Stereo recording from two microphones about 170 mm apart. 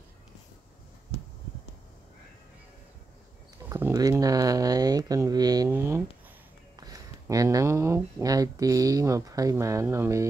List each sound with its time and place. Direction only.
3.6 s speech: 15° right (ahead or behind)
5.7 s a sound: 15° right (ahead or behind)
6.8 s speech: 20° right (ahead or behind)